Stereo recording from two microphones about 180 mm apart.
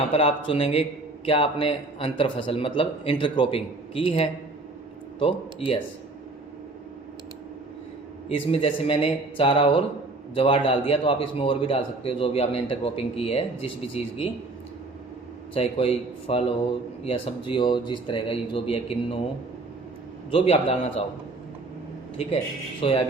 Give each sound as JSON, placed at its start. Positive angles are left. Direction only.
{"t": 0.1, "sound": "a man's voice", "side_deg": 30}
{"t": 8.3, "sound": "a man's voice", "side_deg": 30}
{"t": 15.5, "sound": "a man's voice", "side_deg": 35}
{"t": 20.3, "sound": "a man's voice", "side_deg": 35}
{"t": 22.8, "sound": "a man's voice", "side_deg": 30}